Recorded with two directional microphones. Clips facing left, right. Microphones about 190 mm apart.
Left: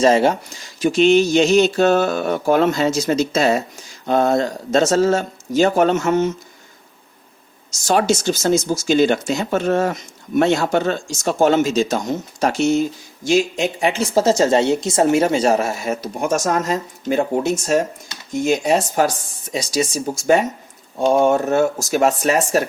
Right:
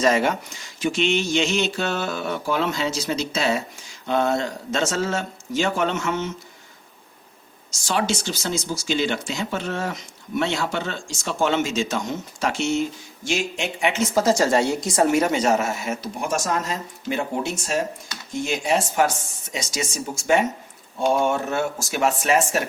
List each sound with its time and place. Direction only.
0.0 s speech: 30° left (ahead or behind)
7.9 s speech: 45° left (ahead or behind)